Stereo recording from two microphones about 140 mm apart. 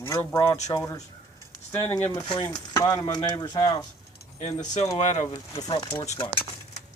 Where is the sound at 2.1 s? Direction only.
35° left (ahead or behind).